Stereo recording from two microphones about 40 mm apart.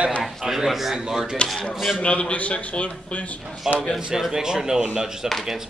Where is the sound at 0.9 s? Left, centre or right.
Centre.